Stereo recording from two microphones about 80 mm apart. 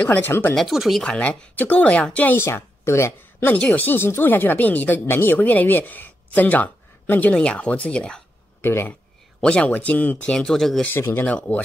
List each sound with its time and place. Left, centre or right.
0.0 s speech: left
0.6 s speech: centre
1.0 s speech: centre
2.3 s a woman's voice: left
3.5 s speech: centre
8.5 s speech: left
9.4 s speech: centre
10.9 s speech: left
11.2 s speech: centre